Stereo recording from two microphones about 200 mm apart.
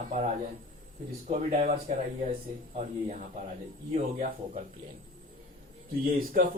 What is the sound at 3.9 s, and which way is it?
Speech, 40° right (ahead or behind).